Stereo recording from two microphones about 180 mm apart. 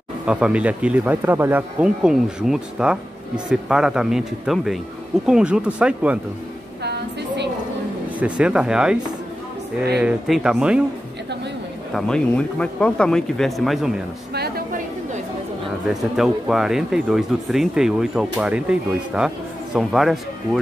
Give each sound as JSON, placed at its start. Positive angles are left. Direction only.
{"t": 0.3, "sound": "speech", "side_deg": -5}
{"t": 6.8, "sound": "a sound", "side_deg": -65}
{"t": 8.2, "sound": "speech", "side_deg": -5}
{"t": 11.9, "sound": "speech", "side_deg": 5}
{"t": 14.3, "sound": "a sound", "side_deg": -60}
{"t": 15.9, "sound": "speech", "side_deg": 0}